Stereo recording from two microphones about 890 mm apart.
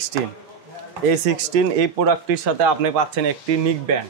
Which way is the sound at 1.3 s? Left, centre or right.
Right.